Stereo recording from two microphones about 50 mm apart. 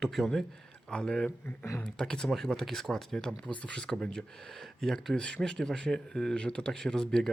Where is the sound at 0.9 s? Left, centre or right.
Centre.